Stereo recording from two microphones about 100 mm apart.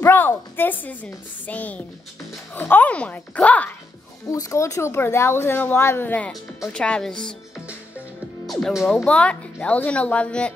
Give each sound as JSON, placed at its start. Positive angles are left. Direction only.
{"t": 0.0, "sound": "a woman's voice", "side_deg": 25}
{"t": 4.3, "sound": "a woman's voice", "side_deg": 35}
{"t": 8.7, "sound": "speech", "side_deg": 0}
{"t": 9.0, "sound": "a woman's voice", "side_deg": 10}